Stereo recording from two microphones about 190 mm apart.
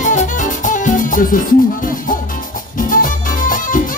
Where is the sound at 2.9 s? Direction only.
45° left (ahead or behind).